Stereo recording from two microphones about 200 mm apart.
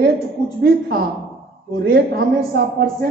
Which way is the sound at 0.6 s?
50° right (ahead or behind).